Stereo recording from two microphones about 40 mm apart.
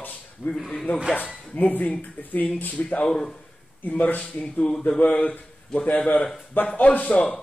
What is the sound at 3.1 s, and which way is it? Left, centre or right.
Speech, centre.